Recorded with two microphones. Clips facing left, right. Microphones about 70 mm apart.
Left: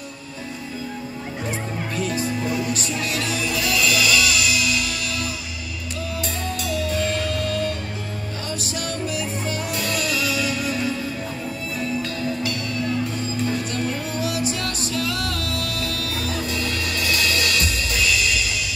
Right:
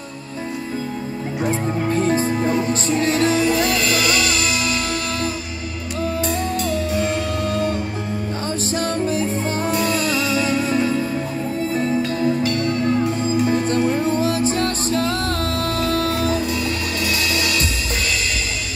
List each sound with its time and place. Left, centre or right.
2.0 s music: right
7.0 s music: right
8.7 s music: right
12.2 s music: right
12.5 s music: right
16.4 s music: centre